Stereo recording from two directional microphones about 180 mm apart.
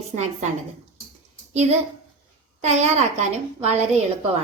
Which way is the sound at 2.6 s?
35° right (ahead or behind).